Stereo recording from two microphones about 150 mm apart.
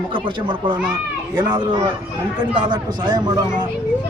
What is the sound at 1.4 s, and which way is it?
A man's voice, 30° right (ahead or behind).